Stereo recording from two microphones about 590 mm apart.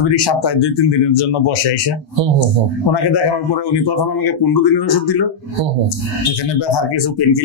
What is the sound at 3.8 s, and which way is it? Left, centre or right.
Speech, left.